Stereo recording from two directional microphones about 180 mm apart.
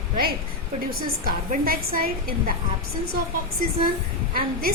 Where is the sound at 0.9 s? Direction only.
55° right (ahead or behind).